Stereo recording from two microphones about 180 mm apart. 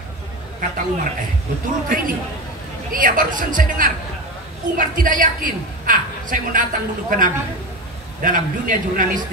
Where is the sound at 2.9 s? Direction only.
50° right (ahead or behind).